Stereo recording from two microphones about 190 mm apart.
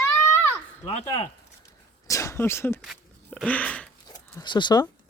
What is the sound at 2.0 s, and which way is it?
Speech, 15° left (ahead or behind).